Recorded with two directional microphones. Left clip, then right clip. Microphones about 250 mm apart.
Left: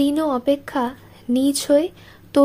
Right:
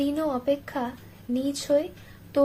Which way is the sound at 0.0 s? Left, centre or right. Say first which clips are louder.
Left 7 dB; left.